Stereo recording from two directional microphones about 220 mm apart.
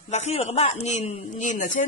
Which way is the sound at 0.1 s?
30° left (ahead or behind).